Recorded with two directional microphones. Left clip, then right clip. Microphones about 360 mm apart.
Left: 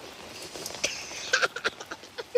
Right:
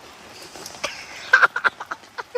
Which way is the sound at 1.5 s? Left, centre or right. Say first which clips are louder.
Right 10 dB; centre.